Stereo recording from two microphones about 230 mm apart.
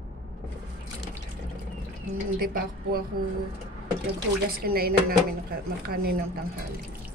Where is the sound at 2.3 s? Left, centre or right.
Right.